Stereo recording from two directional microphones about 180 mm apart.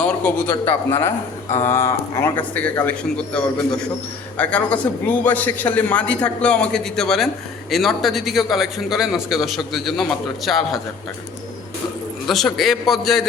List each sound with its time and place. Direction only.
0.6 s a man's voice: 10° left (ahead or behind)
12.2 s a man's voice: centre (ahead or behind)